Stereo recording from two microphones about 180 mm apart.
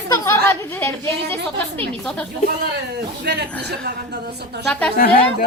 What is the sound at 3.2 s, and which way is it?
Speech, 65° right (ahead or behind).